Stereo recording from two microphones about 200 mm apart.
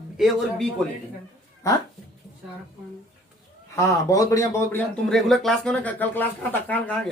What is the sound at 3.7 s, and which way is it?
Speech, 15° left (ahead or behind).